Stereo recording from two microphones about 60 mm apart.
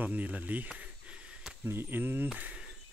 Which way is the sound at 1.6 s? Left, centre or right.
Right.